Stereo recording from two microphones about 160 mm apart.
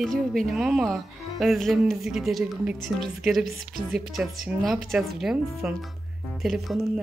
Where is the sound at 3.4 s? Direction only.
70° right (ahead or behind).